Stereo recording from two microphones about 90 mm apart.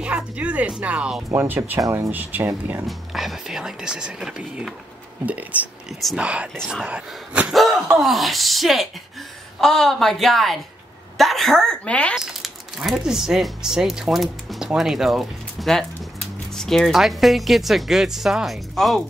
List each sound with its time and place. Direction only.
0.0 s speech: 15° right (ahead or behind)
1.3 s speech: 25° right (ahead or behind)
1.8 s speech: 35° right (ahead or behind)
2.0 s speech: 20° right (ahead or behind)
2.9 s speech: centre (ahead or behind)
7.5 s gasp: centre (ahead or behind)
8.0 s a woman's voice: centre (ahead or behind)
12.2 s speech: 5° right (ahead or behind)